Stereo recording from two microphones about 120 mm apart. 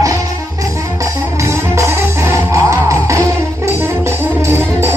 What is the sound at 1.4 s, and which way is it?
Music, 25° right (ahead or behind).